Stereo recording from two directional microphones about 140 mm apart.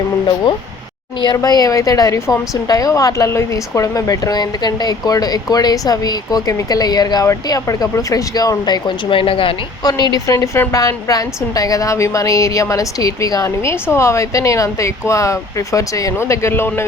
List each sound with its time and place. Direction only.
1.2 s a woman's voice: 30° left (ahead or behind)